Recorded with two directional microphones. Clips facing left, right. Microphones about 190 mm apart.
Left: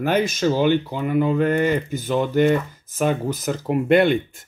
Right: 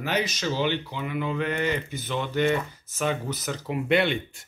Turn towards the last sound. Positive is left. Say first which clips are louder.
# left 7 dB
turn(degrees=50)  # may be behind; listen again after turning